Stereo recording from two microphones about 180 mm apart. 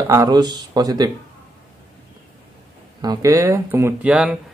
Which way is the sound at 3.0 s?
20° right (ahead or behind).